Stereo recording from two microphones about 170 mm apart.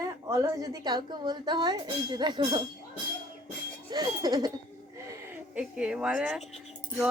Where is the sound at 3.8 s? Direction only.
25° right (ahead or behind).